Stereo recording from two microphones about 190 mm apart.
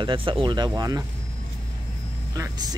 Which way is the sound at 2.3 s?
20° right (ahead or behind).